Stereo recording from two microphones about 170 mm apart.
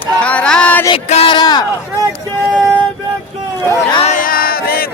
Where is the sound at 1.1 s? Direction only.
30° left (ahead or behind).